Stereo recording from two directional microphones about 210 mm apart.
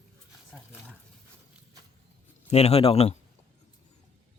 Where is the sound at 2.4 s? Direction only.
30° left (ahead or behind).